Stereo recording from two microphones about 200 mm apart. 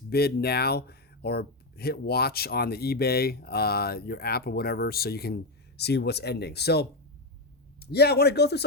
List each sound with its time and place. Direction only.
0.1 s speech: 50° left (ahead or behind)